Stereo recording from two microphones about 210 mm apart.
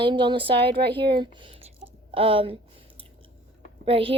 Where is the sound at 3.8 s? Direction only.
25° right (ahead or behind).